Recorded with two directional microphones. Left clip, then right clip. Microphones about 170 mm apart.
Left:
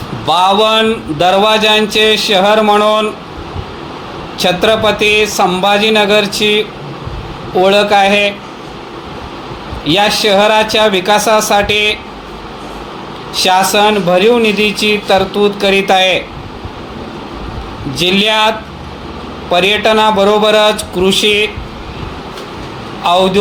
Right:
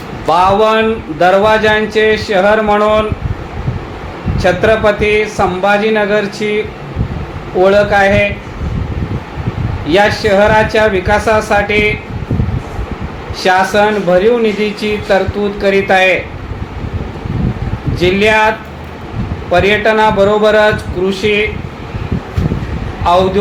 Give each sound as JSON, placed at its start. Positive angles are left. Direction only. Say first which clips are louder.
{"t": 0.3, "sound": "speech", "louder": "even", "side_deg": 40}
{"t": 4.4, "sound": "speech", "louder": "even", "side_deg": 40}
{"t": 7.6, "sound": "speech", "louder": "even", "side_deg": 40}
{"t": 9.8, "sound": "speech", "louder": "even", "side_deg": 40}
{"t": 13.3, "sound": "speech", "louder": "left 1 dB", "side_deg": 40}
{"t": 17.9, "sound": "speech", "louder": "right 1 dB", "side_deg": 45}